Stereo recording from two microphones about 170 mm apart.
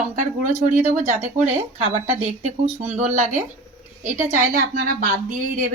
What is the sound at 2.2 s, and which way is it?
A woman's voice, 40° right (ahead or behind).